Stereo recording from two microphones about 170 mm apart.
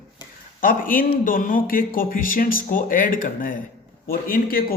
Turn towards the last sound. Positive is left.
turn(degrees=60)  # may be behind; listen again after turning